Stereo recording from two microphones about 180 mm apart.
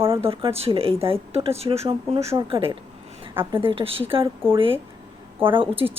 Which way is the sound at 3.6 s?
30° right (ahead or behind).